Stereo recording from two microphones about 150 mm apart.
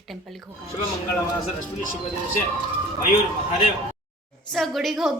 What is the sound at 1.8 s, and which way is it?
Speech, 60° left (ahead or behind).